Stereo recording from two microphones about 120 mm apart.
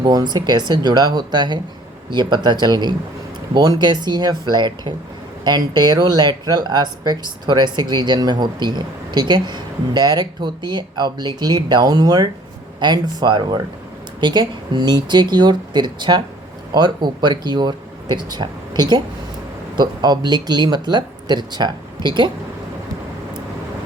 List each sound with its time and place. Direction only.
0.0 s speech: 35° right (ahead or behind)